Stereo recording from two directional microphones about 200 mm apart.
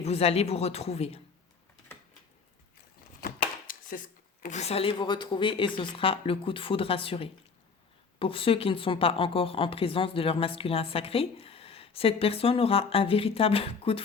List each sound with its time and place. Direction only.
0.0 s speech: 30° left (ahead or behind)
3.2 s a sound: 45° left (ahead or behind)
4.4 s speech: 35° left (ahead or behind)